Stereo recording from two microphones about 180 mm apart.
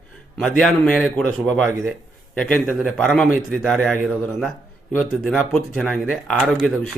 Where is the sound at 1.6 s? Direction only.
15° right (ahead or behind).